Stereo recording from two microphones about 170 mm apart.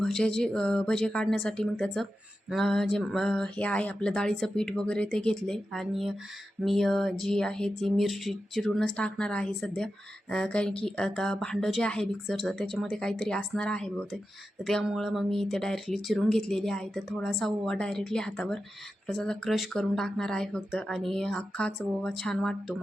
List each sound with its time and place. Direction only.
0.0 s speech: 5° left (ahead or behind)